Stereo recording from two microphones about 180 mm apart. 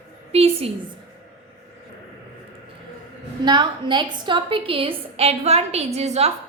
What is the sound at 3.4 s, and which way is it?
A woman's voice, 25° right (ahead or behind).